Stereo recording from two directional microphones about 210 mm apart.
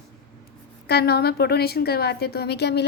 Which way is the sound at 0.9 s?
50° left (ahead or behind).